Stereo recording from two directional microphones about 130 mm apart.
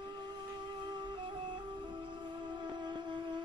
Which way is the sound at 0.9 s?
35° right (ahead or behind).